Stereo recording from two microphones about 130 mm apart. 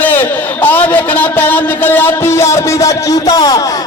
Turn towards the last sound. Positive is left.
turn(degrees=30)  # may be behind; listen again after turning